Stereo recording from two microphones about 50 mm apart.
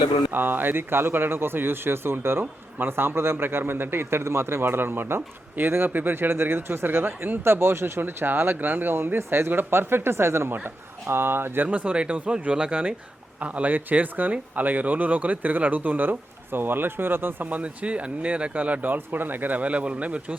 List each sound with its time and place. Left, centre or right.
0.3 s a man's voice: right
10.5 s a man's voice: right
11.7 s speech: right
12.3 s speech: centre
13.4 s speech: right
17.6 s speech: right